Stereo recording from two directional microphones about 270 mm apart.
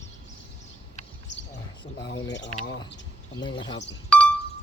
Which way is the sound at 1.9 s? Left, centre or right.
Left.